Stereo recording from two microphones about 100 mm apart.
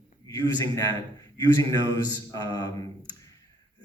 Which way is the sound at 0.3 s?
40° left (ahead or behind).